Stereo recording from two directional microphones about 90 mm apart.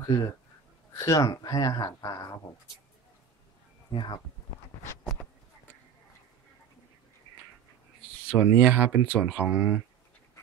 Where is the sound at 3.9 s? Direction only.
65° left (ahead or behind).